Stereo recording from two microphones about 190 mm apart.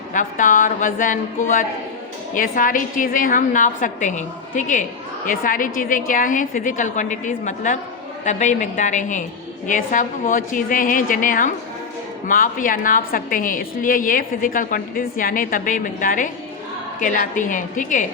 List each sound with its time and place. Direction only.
0.1 s a woman's voice: 45° left (ahead or behind)